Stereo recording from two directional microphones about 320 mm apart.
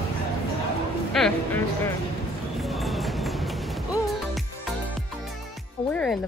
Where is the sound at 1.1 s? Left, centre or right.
Centre.